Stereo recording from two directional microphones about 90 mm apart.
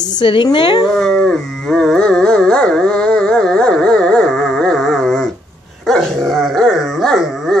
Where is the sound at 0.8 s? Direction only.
5° left (ahead or behind).